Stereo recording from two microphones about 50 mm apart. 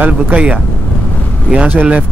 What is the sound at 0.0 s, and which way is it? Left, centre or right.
Speech, right.